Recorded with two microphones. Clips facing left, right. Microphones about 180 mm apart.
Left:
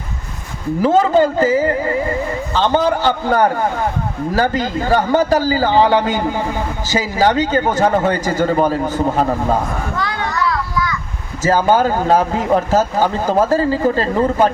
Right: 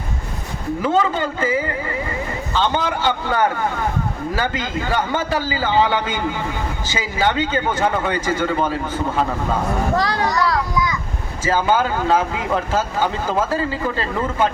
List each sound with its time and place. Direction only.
0.8 s a man's voice: 40° left (ahead or behind)
9.9 s a sound: 35° right (ahead or behind)
11.4 s a man's voice: 40° left (ahead or behind)